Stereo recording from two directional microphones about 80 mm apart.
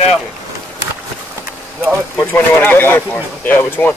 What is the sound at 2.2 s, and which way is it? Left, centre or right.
Speech, left.